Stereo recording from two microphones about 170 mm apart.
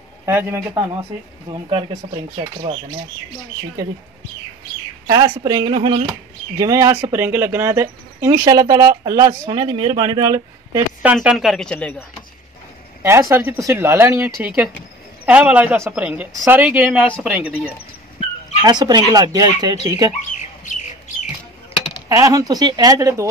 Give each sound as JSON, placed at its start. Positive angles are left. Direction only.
{"t": 0.2, "sound": "a man's voice", "side_deg": -15}
{"t": 1.5, "sound": "speech", "side_deg": -30}
{"t": 5.0, "sound": "speech", "side_deg": -20}
{"t": 11.0, "sound": "speech", "side_deg": -5}
{"t": 13.0, "sound": "a woman's voice", "side_deg": -15}
{"t": 18.6, "sound": "speech", "side_deg": -25}
{"t": 20.2, "sound": "bird", "side_deg": 45}
{"t": 22.1, "sound": "speech", "side_deg": -20}